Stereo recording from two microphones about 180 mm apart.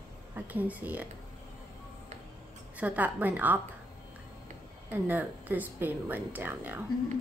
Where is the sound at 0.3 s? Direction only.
10° right (ahead or behind).